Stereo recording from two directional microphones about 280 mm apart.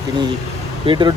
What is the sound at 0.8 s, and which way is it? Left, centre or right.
Speech, centre.